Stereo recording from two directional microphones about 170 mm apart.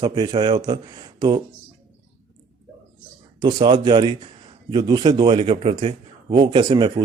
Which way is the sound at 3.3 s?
25° right (ahead or behind).